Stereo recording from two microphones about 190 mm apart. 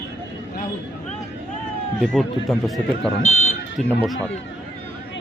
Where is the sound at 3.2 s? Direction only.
35° left (ahead or behind).